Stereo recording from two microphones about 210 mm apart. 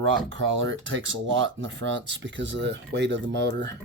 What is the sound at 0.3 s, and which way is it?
Speech, 65° right (ahead or behind).